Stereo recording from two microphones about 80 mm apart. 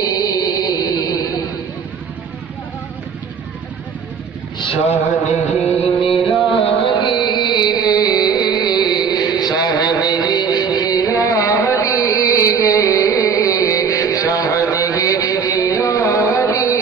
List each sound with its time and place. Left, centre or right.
0.0 s music: left
5.9 s music: centre
6.5 s music: left